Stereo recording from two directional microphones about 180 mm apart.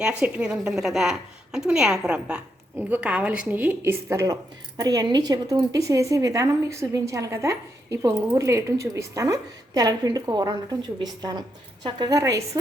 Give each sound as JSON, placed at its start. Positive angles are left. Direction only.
{"t": 0.0, "sound": "a woman's voice", "side_deg": -5}